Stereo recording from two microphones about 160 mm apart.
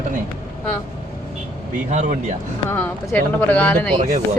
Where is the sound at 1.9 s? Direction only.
50° right (ahead or behind).